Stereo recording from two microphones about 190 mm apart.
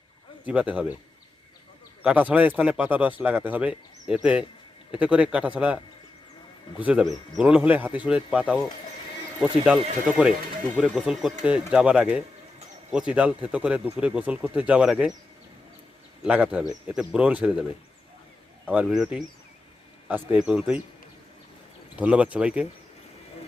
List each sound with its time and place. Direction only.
0.4 s a man's voice: 5° right (ahead or behind)
2.0 s a man's voice: 10° right (ahead or behind)
6.8 s speech: 5° right (ahead or behind)
10.8 s a man's voice: 5° right (ahead or behind)
16.2 s a man's voice: 5° right (ahead or behind)
18.7 s a man's voice: 5° right (ahead or behind)
21.9 s a man's voice: 5° right (ahead or behind)